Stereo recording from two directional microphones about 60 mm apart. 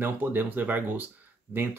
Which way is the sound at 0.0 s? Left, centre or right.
Right.